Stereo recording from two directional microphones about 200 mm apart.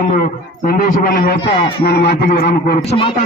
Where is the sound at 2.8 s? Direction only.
30° left (ahead or behind).